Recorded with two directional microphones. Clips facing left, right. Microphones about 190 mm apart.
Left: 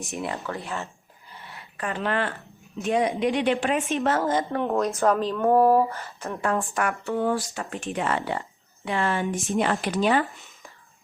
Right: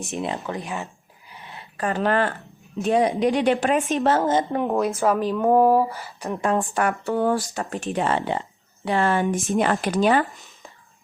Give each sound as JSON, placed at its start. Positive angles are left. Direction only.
{"t": 0.2, "sound": "speech", "side_deg": -20}
{"t": 1.3, "sound": "a sound", "side_deg": -15}
{"t": 1.8, "sound": "speech", "side_deg": -40}
{"t": 4.2, "sound": "a woman's voice", "side_deg": -25}
{"t": 4.9, "sound": "speech", "side_deg": 0}
{"t": 7.0, "sound": "speech", "side_deg": -40}
{"t": 8.8, "sound": "speech", "side_deg": -40}
{"t": 9.5, "sound": "speech", "side_deg": -50}